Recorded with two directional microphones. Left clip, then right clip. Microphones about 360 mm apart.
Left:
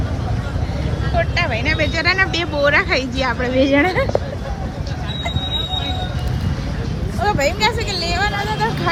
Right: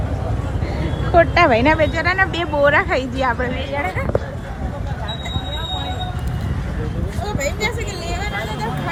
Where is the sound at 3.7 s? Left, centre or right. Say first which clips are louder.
Left 7 dB; left.